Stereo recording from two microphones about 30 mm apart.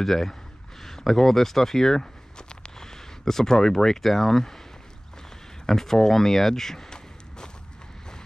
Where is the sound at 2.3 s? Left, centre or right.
Centre.